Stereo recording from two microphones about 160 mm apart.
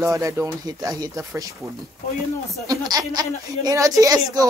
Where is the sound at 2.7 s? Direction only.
25° right (ahead or behind).